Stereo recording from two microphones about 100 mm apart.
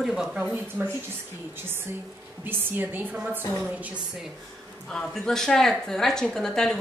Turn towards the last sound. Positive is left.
turn(degrees=5)  # may be behind; listen again after turning